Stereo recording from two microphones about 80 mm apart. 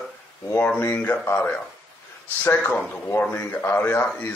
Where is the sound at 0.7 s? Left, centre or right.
Left.